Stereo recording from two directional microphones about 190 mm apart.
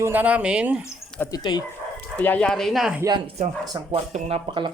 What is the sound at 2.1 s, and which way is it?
Speech, 10° left (ahead or behind).